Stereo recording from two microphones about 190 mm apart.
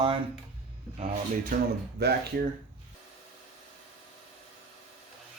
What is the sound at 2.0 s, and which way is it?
Speech, 60° right (ahead or behind).